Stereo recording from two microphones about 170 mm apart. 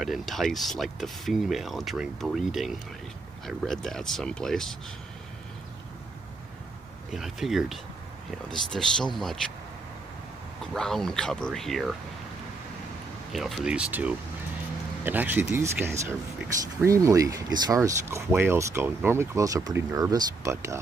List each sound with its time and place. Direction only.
0.0 s speech: centre (ahead or behind)
7.1 s speech: centre (ahead or behind)
10.7 s speech: centre (ahead or behind)
13.3 s speech: centre (ahead or behind); by 20.8 s 15° right (ahead or behind)